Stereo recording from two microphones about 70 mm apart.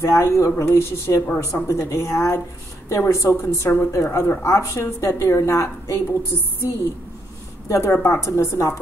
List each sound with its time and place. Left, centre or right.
0.0 s a woman's voice: left
3.6 s a woman's voice: left
3.9 s a woman's voice: left
7.6 s a woman's voice: left
7.9 s a woman's voice: left